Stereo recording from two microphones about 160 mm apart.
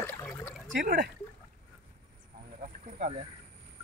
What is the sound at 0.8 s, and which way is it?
Speech, 90° right.